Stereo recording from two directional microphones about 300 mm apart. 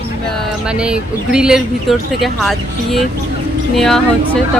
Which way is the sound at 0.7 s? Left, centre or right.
Centre.